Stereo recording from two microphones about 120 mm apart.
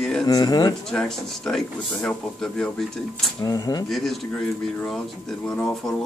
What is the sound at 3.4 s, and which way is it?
Speech, 30° left (ahead or behind).